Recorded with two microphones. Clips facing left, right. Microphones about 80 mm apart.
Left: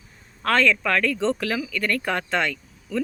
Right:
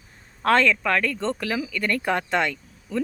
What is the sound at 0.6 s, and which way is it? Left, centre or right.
Speech, centre.